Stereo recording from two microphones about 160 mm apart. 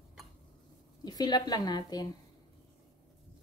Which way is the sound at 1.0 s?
25° left (ahead or behind).